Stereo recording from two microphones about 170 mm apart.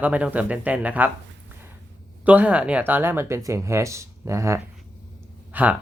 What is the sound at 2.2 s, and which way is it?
Speech, 10° right (ahead or behind).